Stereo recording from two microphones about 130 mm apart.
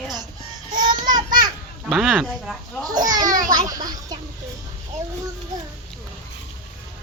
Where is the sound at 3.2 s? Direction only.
90° right.